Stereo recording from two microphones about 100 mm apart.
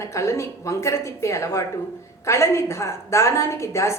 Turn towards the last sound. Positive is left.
turn(degrees=30)  # may be behind; listen again after turning